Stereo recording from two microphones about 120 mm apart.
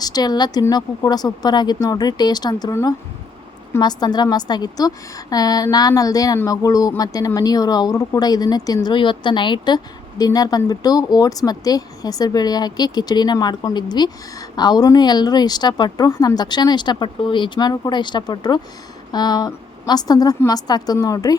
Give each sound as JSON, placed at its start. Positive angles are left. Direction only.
{"t": 0.0, "sound": "a woman's voice", "side_deg": 35}
{"t": 3.8, "sound": "speech", "side_deg": 35}